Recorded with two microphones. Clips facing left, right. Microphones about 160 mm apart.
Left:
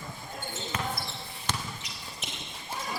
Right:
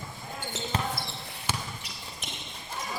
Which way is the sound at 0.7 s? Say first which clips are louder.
Right 3 dB; 30° right (ahead or behind).